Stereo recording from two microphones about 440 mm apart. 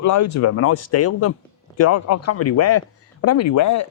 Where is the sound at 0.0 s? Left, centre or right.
Left.